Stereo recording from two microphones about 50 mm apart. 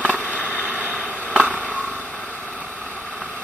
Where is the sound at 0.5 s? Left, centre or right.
Right.